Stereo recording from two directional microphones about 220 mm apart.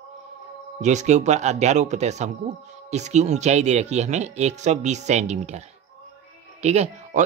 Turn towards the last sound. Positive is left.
turn(degrees=-30)  # may be behind; listen again after turning